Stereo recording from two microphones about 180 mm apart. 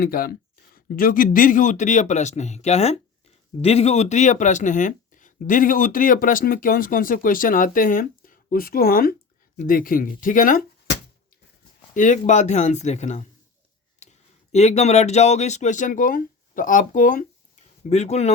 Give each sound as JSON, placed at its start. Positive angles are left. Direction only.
{"t": 0.0, "sound": "speech", "side_deg": 55}
{"t": 11.9, "sound": "speech", "side_deg": 45}
{"t": 14.0, "sound": "a sound", "side_deg": 40}
{"t": 14.5, "sound": "speech", "side_deg": 35}